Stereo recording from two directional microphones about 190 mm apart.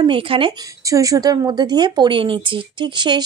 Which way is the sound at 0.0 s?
25° right (ahead or behind).